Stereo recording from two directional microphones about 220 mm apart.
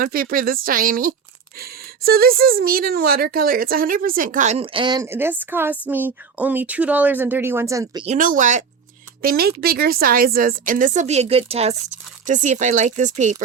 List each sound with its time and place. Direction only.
0.0 s speech: 40° right (ahead or behind); by 8.0 s 15° right (ahead or behind)
8.0 s speech: 35° right (ahead or behind)